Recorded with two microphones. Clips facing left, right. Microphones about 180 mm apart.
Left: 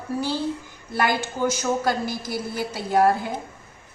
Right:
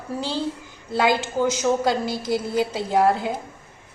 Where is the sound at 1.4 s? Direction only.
20° right (ahead or behind).